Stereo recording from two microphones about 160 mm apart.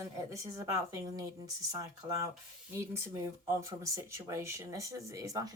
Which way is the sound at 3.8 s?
20° right (ahead or behind).